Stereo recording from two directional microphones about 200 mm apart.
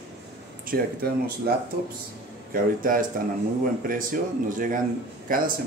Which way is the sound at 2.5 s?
45° right (ahead or behind).